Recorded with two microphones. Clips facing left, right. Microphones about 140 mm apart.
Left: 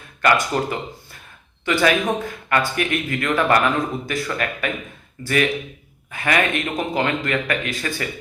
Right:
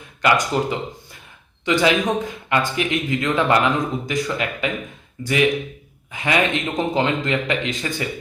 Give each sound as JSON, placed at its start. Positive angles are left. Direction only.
{"t": 0.2, "sound": "speech", "side_deg": -15}